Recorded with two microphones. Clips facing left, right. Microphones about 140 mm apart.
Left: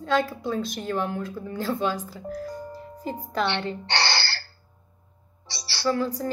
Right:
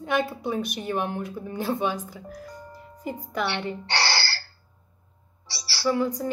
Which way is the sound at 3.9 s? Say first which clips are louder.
Even; 20° left (ahead or behind).